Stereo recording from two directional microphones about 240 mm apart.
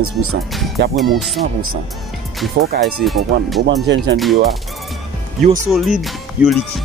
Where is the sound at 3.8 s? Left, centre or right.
Right.